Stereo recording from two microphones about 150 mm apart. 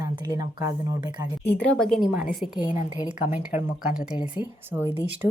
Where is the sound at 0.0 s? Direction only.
25° right (ahead or behind).